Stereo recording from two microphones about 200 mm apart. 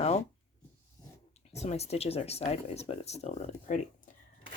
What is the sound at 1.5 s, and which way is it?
Speech, 30° left (ahead or behind).